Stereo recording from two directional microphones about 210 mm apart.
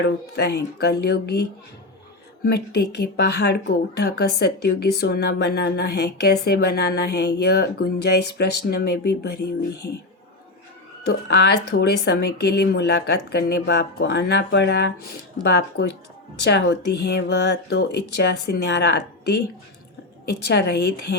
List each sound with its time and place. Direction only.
0.0 s a woman's voice: 55° left (ahead or behind)
11.0 s a woman's voice: 50° left (ahead or behind)